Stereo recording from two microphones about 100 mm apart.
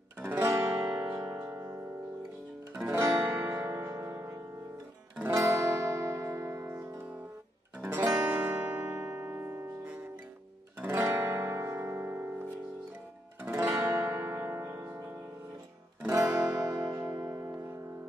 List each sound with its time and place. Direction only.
0.2 s music: 25° right (ahead or behind)
0.9 s music: 35° right (ahead or behind)
2.7 s guitar: 25° right (ahead or behind)
5.3 s music: 30° right (ahead or behind)
10.8 s guitar: 25° right (ahead or behind)
13.4 s music: 25° right (ahead or behind)
16.3 s music: 35° right (ahead or behind)